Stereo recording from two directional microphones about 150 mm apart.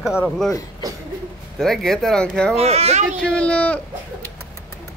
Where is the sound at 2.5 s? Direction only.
45° right (ahead or behind).